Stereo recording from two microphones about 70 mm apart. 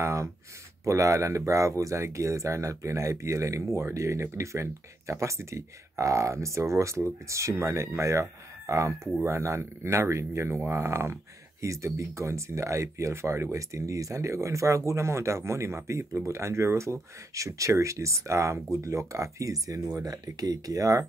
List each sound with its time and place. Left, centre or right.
0.0 s speech: right